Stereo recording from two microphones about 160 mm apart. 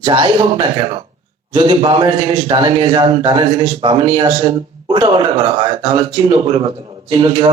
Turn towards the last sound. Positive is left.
turn(degrees=-30)  # may be behind; listen again after turning